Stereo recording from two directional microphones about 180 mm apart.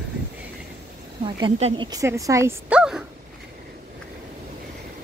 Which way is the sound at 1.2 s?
25° right (ahead or behind).